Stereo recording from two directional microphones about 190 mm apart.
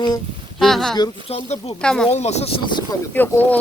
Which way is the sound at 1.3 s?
35° left (ahead or behind).